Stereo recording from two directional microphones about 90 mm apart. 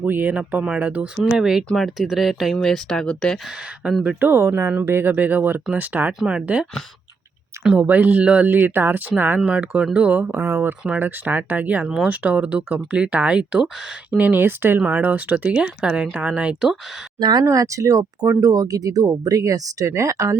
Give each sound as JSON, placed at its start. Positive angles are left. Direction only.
{"t": 0.0, "sound": "speech", "side_deg": -20}
{"t": 3.8, "sound": "speech", "side_deg": -20}
{"t": 4.2, "sound": "speech", "side_deg": -30}
{"t": 7.8, "sound": "speech", "side_deg": -20}
{"t": 17.2, "sound": "speech", "side_deg": -50}
{"t": 17.4, "sound": "speech", "side_deg": -35}